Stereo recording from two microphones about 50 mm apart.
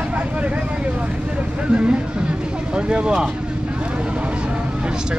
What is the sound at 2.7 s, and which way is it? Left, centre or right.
Speech, centre.